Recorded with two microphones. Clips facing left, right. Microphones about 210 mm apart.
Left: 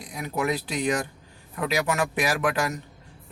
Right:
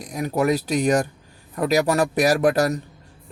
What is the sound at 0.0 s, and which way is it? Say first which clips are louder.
Speech: right 6 dB; 40° right (ahead or behind).